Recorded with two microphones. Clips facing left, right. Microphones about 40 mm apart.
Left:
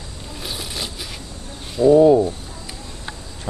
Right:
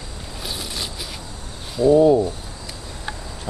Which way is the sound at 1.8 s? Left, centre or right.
Centre.